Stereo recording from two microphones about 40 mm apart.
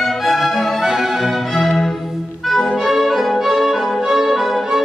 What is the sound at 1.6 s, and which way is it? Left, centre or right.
Music, centre.